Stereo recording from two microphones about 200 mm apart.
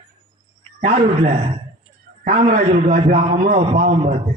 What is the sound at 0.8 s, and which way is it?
A man's voice, 35° right (ahead or behind).